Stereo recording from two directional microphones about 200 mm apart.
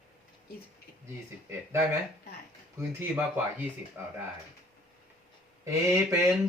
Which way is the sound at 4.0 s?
10° right (ahead or behind).